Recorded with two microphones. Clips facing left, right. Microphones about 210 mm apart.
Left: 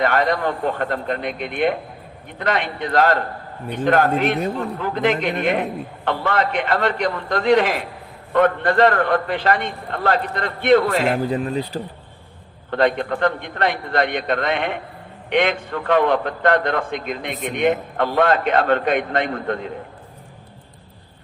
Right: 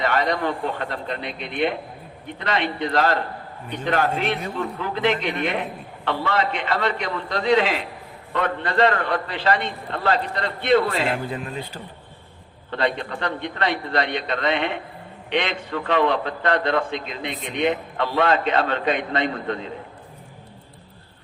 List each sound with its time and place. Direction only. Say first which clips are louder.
0.0 s a man's voice: left 3 dB; 50° left (ahead or behind)
12.7 s a man's voice: left 6 dB; 50° left (ahead or behind)